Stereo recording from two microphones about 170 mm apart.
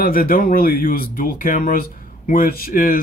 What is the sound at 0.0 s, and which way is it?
Speech, 55° left (ahead or behind).